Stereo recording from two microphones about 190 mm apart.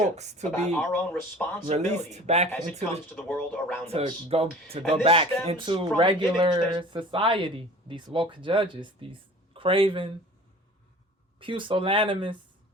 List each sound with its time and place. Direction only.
0.2 s speech: 35° right (ahead or behind)
0.7 s speech: 5° left (ahead or behind)
1.6 s speech: 35° right (ahead or behind)
3.1 s speech: 10° left (ahead or behind)
3.8 s speech: 30° right (ahead or behind)
11.3 s speech: 25° right (ahead or behind)